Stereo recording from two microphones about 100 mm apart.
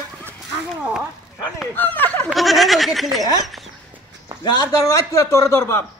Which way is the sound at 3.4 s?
Centre (ahead or behind).